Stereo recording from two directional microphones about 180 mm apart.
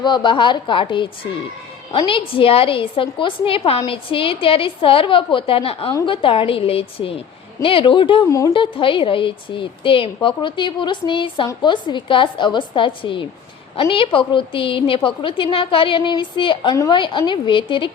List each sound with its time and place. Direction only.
0.0 s a woman's voice: 25° left (ahead or behind)
8.5 s a woman's voice: 30° left (ahead or behind)